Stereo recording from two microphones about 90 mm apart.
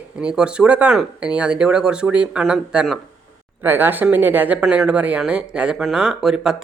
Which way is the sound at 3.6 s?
20° right (ahead or behind).